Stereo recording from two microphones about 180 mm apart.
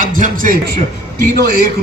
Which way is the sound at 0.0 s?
45° right (ahead or behind).